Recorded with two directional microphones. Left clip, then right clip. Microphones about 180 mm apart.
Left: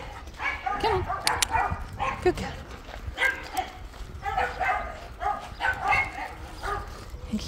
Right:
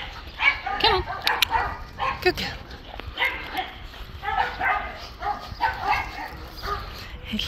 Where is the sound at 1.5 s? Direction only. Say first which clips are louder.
Right 1 dB; 45° right (ahead or behind).